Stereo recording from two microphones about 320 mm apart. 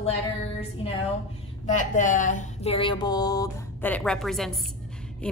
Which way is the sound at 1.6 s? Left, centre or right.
Left.